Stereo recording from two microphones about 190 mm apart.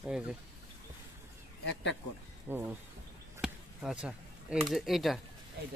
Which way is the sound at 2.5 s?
10° right (ahead or behind).